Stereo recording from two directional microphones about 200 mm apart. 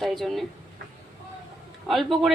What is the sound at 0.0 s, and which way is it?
Speech, centre (ahead or behind).